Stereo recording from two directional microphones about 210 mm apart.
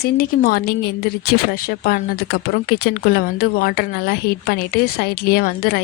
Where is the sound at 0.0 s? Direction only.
45° left (ahead or behind).